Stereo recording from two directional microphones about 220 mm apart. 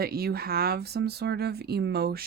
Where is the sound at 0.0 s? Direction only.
45° right (ahead or behind).